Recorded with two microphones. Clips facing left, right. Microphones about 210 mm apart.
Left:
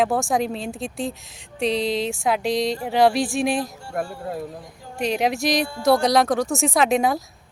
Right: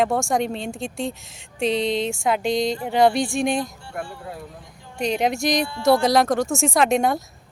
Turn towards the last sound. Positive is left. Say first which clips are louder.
# even
turn(degrees=0)  # may be behind; listen again after turning